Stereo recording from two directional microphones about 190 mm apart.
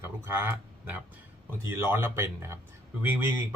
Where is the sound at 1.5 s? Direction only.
15° right (ahead or behind).